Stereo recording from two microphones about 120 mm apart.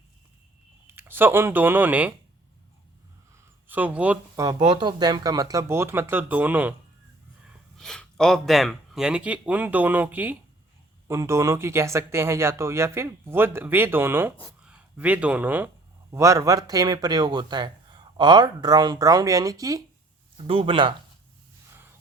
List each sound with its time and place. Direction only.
0.9 s speech: 20° right (ahead or behind)
3.7 s speech: 15° right (ahead or behind)
4.7 s speech: 40° right (ahead or behind); by 6.7 s 15° right (ahead or behind)
7.8 s speech: 5° left (ahead or behind); by 15.7 s 15° right (ahead or behind)
16.1 s speech: 25° right (ahead or behind)
20.5 s speech: 45° right (ahead or behind)